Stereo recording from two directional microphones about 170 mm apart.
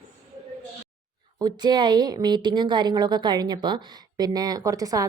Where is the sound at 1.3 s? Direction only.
25° right (ahead or behind).